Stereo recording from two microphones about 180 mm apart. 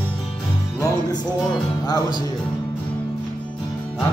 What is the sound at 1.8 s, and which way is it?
Speech, 25° left (ahead or behind).